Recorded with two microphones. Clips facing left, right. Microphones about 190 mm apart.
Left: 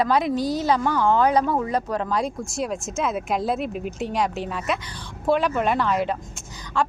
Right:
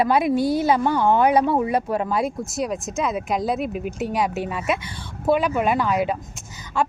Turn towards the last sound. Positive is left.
turn(degrees=-10)  # may be behind; listen again after turning